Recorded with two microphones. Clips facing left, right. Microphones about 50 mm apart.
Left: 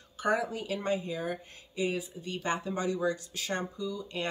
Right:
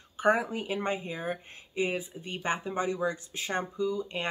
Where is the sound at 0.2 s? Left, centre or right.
Right.